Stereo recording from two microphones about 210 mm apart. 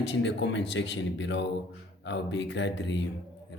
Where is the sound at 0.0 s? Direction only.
55° left (ahead or behind).